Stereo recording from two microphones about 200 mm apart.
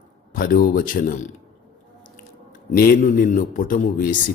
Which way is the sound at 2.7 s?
45° left (ahead or behind).